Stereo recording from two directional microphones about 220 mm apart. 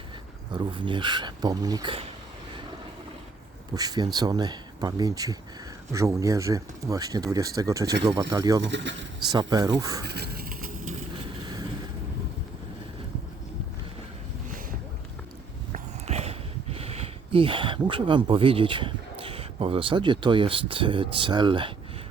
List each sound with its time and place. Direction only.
0.5 s speech: 20° right (ahead or behind)
3.8 s speech: 15° right (ahead or behind)
8.6 s speech: 55° right (ahead or behind)
9.3 s speech: 20° right (ahead or behind)
10.0 s vehicle: 45° right (ahead or behind)
15.7 s speech: 30° right (ahead or behind)